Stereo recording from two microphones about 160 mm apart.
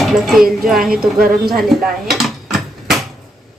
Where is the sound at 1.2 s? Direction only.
70° right (ahead or behind).